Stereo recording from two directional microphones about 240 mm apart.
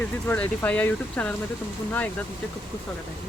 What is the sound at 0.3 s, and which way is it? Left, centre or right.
Speech, centre.